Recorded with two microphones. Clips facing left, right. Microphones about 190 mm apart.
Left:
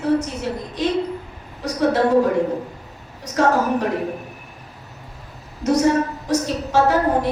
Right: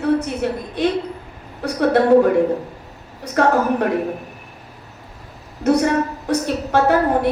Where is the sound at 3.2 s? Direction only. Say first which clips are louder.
Right 2 dB; 60° right (ahead or behind).